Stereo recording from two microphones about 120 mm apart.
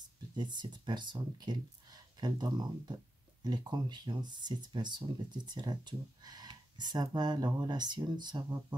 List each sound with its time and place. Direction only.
0.4 s speech: 40° right (ahead or behind)